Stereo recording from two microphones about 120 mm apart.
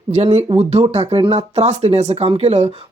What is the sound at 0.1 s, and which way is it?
Speech, 65° right (ahead or behind).